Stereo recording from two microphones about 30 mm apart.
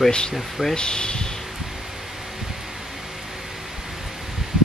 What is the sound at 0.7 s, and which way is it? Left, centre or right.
Speech, left.